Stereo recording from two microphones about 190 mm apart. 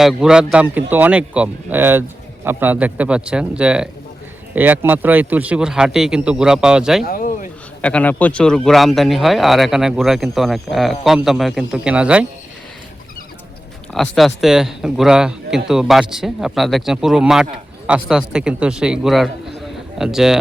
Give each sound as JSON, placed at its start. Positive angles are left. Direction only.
{"t": 0.0, "sound": "a man's voice", "side_deg": 0}
{"t": 7.0, "sound": "a sound", "side_deg": 50}
{"t": 7.8, "sound": "speech", "side_deg": 5}
{"t": 13.9, "sound": "speech", "side_deg": 0}